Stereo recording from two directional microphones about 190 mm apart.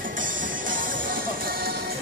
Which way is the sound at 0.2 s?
45° right (ahead or behind).